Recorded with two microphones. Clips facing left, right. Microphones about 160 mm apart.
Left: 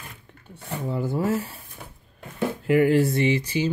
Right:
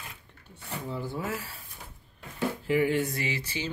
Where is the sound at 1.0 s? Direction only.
40° left (ahead or behind).